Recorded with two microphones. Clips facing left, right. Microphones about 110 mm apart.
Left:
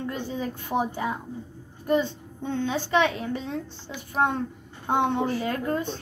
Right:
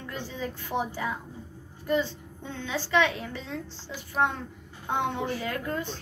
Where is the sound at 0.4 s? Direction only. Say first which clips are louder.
Left 3 dB; 15° left (ahead or behind).